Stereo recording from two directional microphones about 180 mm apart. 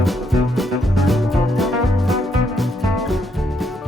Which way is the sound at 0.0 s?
Centre (ahead or behind).